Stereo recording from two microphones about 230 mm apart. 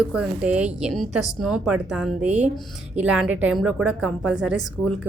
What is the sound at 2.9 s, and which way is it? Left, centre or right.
A woman's voice, centre.